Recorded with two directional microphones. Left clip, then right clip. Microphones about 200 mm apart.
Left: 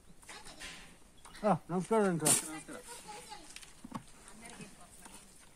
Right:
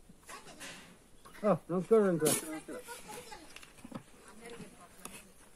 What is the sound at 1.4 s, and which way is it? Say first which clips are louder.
Speech: right 1 dB; 60° left (ahead or behind).